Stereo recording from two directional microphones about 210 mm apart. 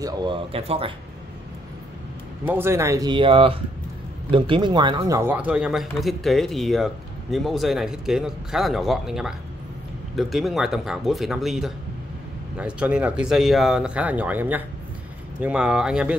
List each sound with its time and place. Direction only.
0.0 s speech: 20° right (ahead or behind)
2.4 s speech: 10° right (ahead or behind)